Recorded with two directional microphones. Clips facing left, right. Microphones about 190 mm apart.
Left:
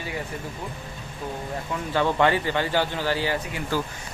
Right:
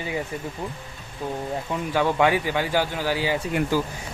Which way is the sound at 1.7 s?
10° right (ahead or behind).